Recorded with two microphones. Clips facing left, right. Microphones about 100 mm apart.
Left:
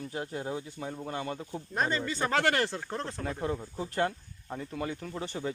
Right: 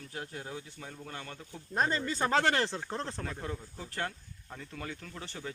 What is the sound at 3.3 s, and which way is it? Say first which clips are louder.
Speech: left 7 dB; 20° left (ahead or behind).